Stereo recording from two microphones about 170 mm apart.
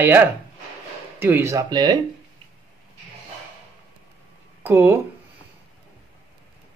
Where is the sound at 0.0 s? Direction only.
15° right (ahead or behind).